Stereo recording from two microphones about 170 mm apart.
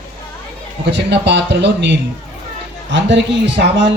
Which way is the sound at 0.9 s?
90° right.